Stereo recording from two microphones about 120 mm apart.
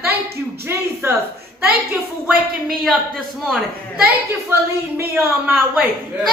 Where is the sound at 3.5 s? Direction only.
Centre (ahead or behind).